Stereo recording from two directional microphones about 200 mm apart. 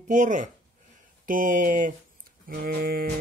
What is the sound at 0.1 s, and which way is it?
Speech, 40° right (ahead or behind).